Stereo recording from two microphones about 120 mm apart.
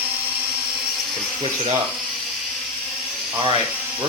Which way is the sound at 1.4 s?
55° right (ahead or behind).